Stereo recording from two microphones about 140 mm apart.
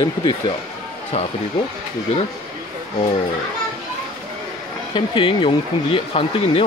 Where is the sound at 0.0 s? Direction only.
30° left (ahead or behind).